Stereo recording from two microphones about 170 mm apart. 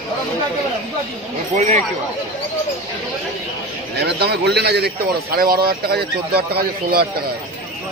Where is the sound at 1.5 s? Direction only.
40° right (ahead or behind).